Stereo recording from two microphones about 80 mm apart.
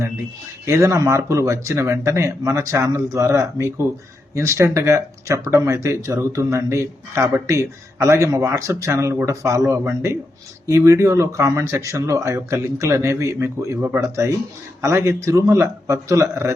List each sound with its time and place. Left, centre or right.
0.6 s speech: right